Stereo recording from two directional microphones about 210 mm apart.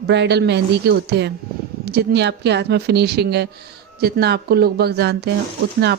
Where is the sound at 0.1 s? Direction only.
55° right (ahead or behind).